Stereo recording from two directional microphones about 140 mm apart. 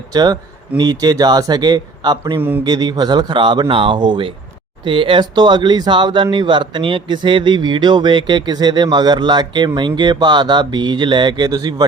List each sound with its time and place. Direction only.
0.1 s a man's voice: 30° right (ahead or behind)